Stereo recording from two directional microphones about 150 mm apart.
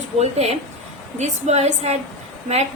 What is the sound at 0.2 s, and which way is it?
A woman's voice, 45° right (ahead or behind).